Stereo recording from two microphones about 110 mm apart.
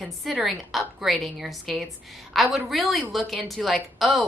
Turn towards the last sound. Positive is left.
turn(degrees=0)  # may be behind; listen again after turning